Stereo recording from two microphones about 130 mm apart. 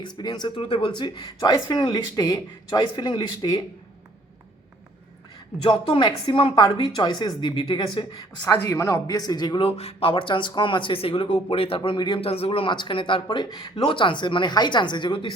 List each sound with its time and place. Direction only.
0.0 s speech: 35° left (ahead or behind)
5.6 s speech: 40° left (ahead or behind)
8.6 s a man's voice: 20° left (ahead or behind)
9.6 s speech: 50° left (ahead or behind)
11.8 s speech: 35° left (ahead or behind)